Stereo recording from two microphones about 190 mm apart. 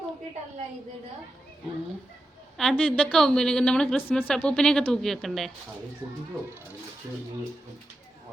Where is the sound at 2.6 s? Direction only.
5° left (ahead or behind).